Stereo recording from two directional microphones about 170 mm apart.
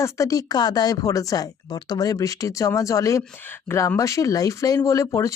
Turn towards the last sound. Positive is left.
turn(degrees=15)  # may be behind; listen again after turning